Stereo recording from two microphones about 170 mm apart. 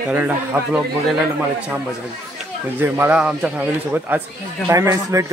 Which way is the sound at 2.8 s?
10° right (ahead or behind).